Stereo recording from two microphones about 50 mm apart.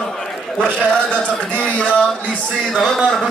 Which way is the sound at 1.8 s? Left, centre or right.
Left.